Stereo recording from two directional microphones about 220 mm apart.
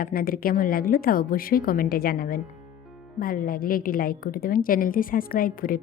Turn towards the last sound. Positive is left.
turn(degrees=40)  # may be behind; listen again after turning